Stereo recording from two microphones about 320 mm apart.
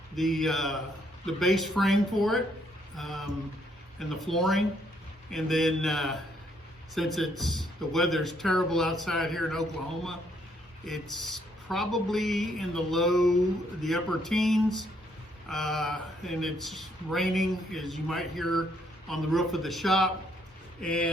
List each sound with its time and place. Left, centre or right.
0.2 s speech: centre